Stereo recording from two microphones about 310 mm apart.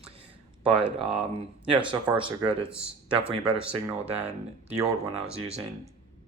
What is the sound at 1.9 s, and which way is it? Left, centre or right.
Speech, centre.